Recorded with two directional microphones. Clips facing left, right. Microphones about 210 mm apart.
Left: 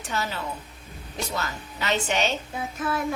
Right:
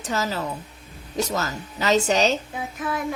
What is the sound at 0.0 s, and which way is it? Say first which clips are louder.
A woman's voice: right 4 dB; 40° right (ahead or behind).